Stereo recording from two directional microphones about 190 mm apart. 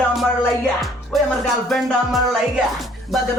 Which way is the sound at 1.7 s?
Centre (ahead or behind).